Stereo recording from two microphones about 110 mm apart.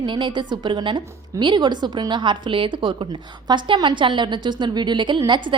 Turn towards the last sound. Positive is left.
turn(degrees=-45)  # may be behind; listen again after turning